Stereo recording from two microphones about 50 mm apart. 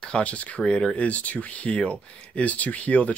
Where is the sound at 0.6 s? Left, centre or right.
Centre.